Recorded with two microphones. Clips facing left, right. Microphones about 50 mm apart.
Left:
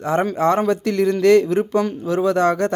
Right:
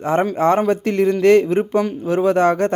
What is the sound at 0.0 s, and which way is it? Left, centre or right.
A man's voice, right.